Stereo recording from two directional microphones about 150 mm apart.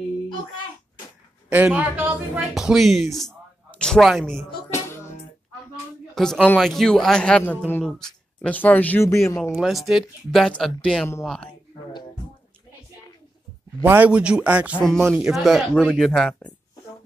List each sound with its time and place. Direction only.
1.5 s speech: 10° right (ahead or behind)
4.6 s music: 20° left (ahead or behind)
6.1 s speech: 5° left (ahead or behind); by 9.4 s 20° left (ahead or behind)
9.6 s speech: centre (ahead or behind)
13.8 s a man's voice: 10° right (ahead or behind)
14.9 s speech: 5° left (ahead or behind)